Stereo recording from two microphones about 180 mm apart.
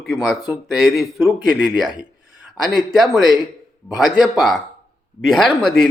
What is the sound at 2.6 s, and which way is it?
Speech, centre (ahead or behind).